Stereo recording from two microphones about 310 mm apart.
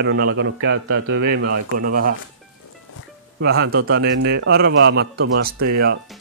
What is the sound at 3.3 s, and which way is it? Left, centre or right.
Speech, right.